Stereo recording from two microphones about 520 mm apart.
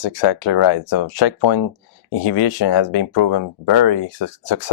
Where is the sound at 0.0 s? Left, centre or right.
Left.